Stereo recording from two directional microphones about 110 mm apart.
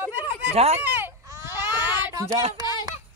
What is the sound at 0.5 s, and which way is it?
Speech, 70° right (ahead or behind).